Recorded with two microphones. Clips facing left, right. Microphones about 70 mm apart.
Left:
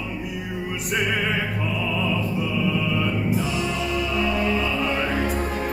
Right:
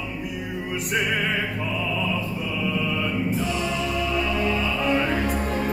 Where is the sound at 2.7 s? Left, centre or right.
Centre.